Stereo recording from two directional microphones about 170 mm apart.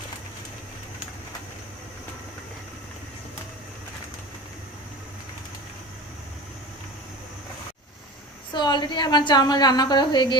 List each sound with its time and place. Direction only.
8.5 s a woman's voice: 25° left (ahead or behind)